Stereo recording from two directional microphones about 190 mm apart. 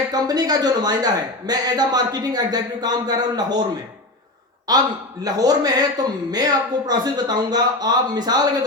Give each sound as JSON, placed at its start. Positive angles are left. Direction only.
{"t": 0.1, "sound": "a man's voice", "side_deg": -20}
{"t": 4.7, "sound": "a man's voice", "side_deg": -20}